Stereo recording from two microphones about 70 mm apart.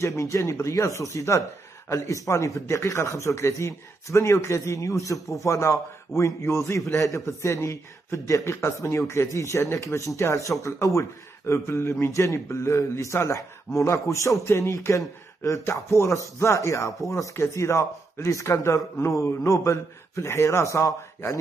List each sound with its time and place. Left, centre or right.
0.0 s a man's voice: left